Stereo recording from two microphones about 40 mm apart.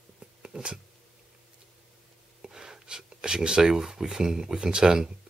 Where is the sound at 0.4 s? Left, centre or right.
Right.